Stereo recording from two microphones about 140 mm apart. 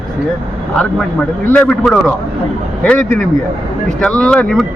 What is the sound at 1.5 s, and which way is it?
Speech, 10° left (ahead or behind).